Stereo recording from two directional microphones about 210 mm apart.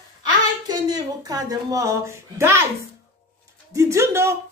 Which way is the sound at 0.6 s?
20° right (ahead or behind).